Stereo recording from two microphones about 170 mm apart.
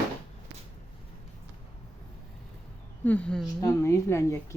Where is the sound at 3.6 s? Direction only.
15° left (ahead or behind).